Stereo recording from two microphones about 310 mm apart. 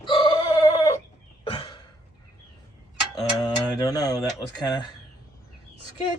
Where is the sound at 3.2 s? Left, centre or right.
Centre.